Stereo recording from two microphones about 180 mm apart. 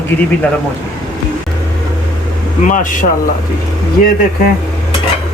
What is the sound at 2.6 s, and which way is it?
Speech, 45° left (ahead or behind).